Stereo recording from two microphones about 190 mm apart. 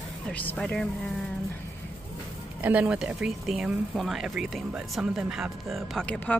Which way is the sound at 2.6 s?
10° right (ahead or behind).